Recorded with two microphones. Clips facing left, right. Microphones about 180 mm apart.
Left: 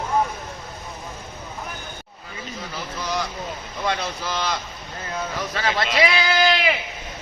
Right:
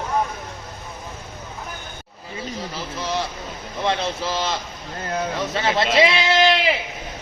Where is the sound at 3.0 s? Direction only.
30° right (ahead or behind).